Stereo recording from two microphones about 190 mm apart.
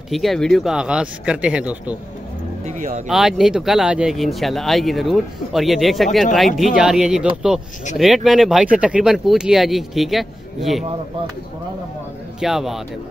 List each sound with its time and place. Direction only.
0.1 s speech: centre (ahead or behind)
2.6 s speech: 45° right (ahead or behind)
3.1 s speech: centre (ahead or behind)
12.4 s speech: centre (ahead or behind)